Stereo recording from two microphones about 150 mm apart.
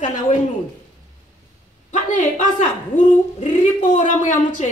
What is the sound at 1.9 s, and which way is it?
A woman's voice, 55° left (ahead or behind).